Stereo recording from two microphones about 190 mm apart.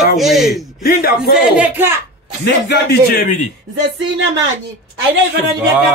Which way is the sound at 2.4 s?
60° left (ahead or behind).